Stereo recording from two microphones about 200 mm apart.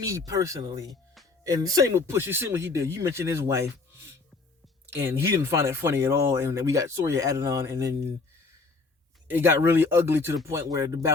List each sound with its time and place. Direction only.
0.0 s speech: 15° right (ahead or behind)
0.9 s music: centre (ahead or behind)
1.5 s speech: 20° right (ahead or behind)
9.2 s speech: 10° right (ahead or behind)